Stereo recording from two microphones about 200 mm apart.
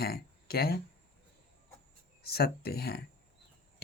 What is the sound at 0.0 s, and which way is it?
Speech, 50° left (ahead or behind).